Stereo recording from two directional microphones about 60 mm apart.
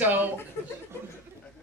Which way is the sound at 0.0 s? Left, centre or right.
Right.